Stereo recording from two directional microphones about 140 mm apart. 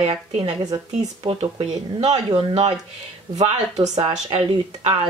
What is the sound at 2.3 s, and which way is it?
Speech, 35° right (ahead or behind).